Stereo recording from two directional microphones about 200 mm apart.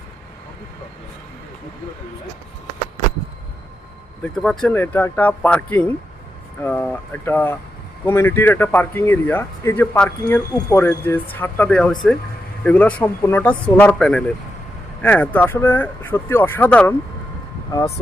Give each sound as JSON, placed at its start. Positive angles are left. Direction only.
{"t": 4.2, "sound": "speech", "side_deg": 5}